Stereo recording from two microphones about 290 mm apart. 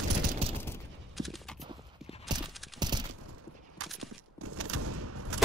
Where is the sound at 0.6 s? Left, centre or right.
Centre.